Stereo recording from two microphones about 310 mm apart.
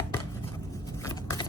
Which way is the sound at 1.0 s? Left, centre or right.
Centre.